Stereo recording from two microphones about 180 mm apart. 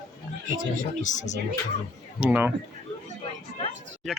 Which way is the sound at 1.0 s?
45° left (ahead or behind).